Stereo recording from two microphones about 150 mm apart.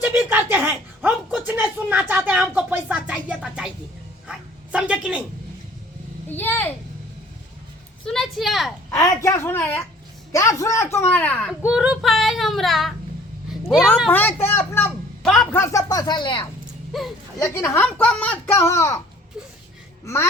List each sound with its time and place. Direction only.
0.0 s a woman's voice: 10° right (ahead or behind)
4.3 s a sound: 5° right (ahead or behind)
6.2 s speech: 15° left (ahead or behind)
8.0 s child singing: 5° left (ahead or behind)
8.9 s speech: 20° left (ahead or behind)
11.6 s child singing: 5° right (ahead or behind)
13.5 s speech: 5° right (ahead or behind)
14.1 s speech: 10° left (ahead or behind)
15.2 s a woman's voice: 5° left (ahead or behind)
15.5 s speech: 25° left (ahead or behind)
17.4 s speech: 20° left (ahead or behind)